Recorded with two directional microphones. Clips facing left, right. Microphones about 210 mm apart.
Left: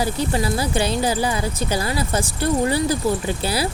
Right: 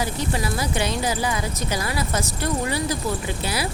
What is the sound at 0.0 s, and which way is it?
Speech, 30° left (ahead or behind).